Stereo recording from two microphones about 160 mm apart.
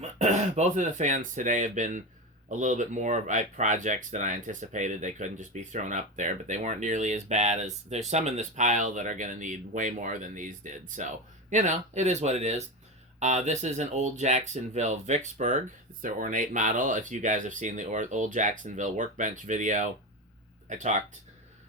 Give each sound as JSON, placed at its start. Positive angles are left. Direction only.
{"t": 0.0, "sound": "speech", "side_deg": -45}